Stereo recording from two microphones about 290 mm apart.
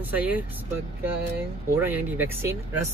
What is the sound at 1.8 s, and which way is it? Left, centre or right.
Speech, centre.